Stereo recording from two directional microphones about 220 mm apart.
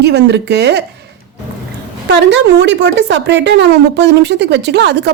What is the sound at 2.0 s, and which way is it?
A woman's voice, 50° right (ahead or behind).